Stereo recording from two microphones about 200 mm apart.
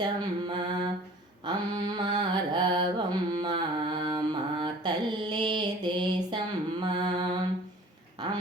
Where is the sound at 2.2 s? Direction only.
25° right (ahead or behind).